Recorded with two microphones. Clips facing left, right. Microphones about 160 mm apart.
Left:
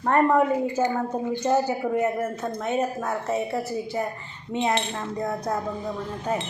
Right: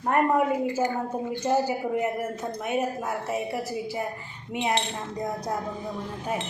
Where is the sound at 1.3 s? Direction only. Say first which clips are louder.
Left 2 dB; 15° right (ahead or behind).